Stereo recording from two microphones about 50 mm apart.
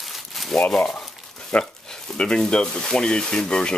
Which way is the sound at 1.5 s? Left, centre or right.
Left.